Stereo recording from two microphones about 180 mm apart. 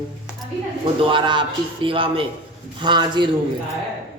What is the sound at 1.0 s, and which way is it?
A woman's voice, 25° right (ahead or behind).